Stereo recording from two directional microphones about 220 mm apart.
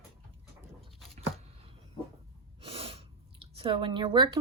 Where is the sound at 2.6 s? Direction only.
25° right (ahead or behind).